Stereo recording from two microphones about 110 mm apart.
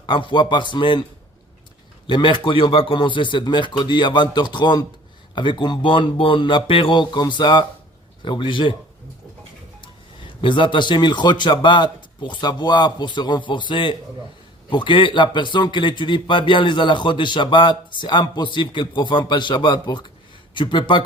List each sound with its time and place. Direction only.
0.0 s a man's voice: 50° left (ahead or behind)
2.0 s a man's voice: 50° left (ahead or behind)
10.4 s a man's voice: 45° left (ahead or behind)